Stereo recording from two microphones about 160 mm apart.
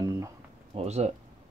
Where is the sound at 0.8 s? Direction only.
45° right (ahead or behind).